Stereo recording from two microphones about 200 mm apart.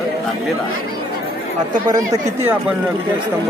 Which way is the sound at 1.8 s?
15° right (ahead or behind).